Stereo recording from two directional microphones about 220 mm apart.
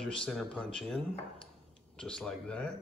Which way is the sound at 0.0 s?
5° left (ahead or behind).